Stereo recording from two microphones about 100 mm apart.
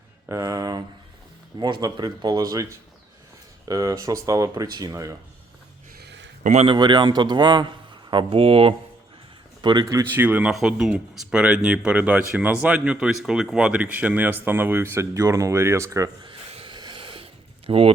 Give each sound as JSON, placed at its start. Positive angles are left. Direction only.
{"t": 0.3, "sound": "speech", "side_deg": -35}
{"t": 3.7, "sound": "speech", "side_deg": -35}
{"t": 6.5, "sound": "speech", "side_deg": -90}
{"t": 6.7, "sound": "speech", "side_deg": -45}
{"t": 8.1, "sound": "speech", "side_deg": -60}
{"t": 9.6, "sound": "speech", "side_deg": -50}
{"t": 9.9, "sound": "speech", "side_deg": -20}
{"t": 10.5, "sound": "speech", "side_deg": -5}
{"t": 16.5, "sound": "a sound", "side_deg": -75}
{"t": 16.7, "sound": "wheeze", "side_deg": -50}
{"t": 17.7, "sound": "speech", "side_deg": -65}